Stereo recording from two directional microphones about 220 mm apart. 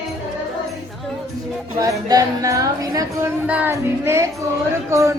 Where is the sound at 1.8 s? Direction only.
15° right (ahead or behind).